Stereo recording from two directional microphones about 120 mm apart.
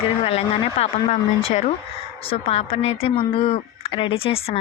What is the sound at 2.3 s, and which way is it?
A woman's voice, 55° left (ahead or behind).